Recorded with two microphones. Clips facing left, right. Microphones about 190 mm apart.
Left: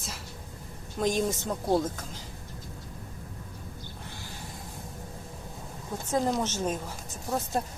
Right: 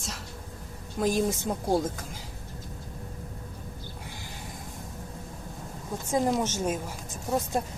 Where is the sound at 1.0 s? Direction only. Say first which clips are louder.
Right 1 dB; 10° right (ahead or behind).